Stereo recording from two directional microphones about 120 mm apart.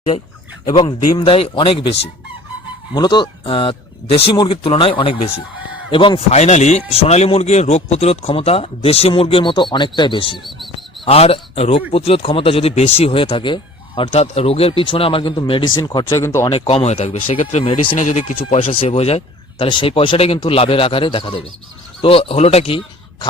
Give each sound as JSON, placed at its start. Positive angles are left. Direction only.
{"t": 0.7, "sound": "speech", "side_deg": 40}
{"t": 2.9, "sound": "speech", "side_deg": 40}
{"t": 6.3, "sound": "a man's voice", "side_deg": 70}
{"t": 10.4, "sound": "bird", "side_deg": 0}
{"t": 11.0, "sound": "speech", "side_deg": 55}
{"t": 14.1, "sound": "a man's voice", "side_deg": 55}
{"t": 15.8, "sound": "speech", "side_deg": 30}
{"t": 16.5, "sound": "a man's voice", "side_deg": 55}
{"t": 17.9, "sound": "speech", "side_deg": 85}
{"t": 18.6, "sound": "speech", "side_deg": 50}